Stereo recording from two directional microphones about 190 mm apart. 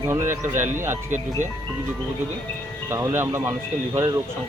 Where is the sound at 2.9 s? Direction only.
15° right (ahead or behind).